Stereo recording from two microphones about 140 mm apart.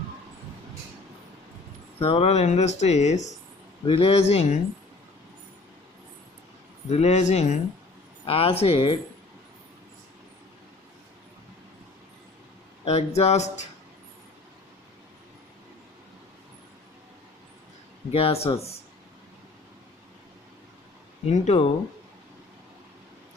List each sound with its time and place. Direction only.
2.0 s speech: 45° left (ahead or behind)
3.8 s speech: 40° left (ahead or behind)
6.8 s speech: 50° left (ahead or behind)
8.2 s speech: 45° left (ahead or behind)
12.8 s speech: 45° left (ahead or behind)
18.1 s speech: 45° left (ahead or behind)
21.2 s speech: 50° left (ahead or behind)